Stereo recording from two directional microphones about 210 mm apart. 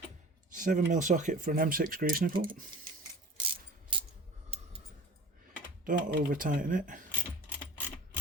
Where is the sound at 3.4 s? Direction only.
25° right (ahead or behind).